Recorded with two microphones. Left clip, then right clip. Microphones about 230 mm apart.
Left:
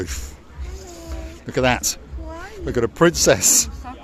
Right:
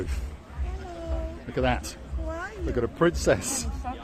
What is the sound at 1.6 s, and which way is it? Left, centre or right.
A man's voice, left.